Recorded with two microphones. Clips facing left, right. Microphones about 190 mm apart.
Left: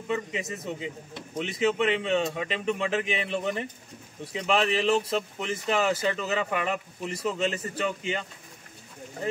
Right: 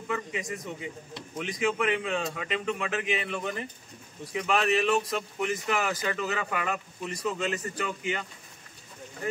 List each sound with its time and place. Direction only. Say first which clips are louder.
0.1 s speech: left 2 dB; 25° left (ahead or behind)